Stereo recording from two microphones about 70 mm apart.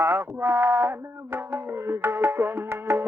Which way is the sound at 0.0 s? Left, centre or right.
Right.